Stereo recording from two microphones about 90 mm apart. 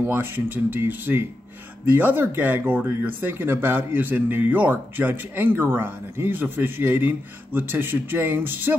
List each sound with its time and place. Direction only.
0.0 s speech: 25° right (ahead or behind)